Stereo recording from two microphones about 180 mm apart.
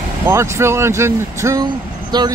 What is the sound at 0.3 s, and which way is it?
Speech, 15° right (ahead or behind).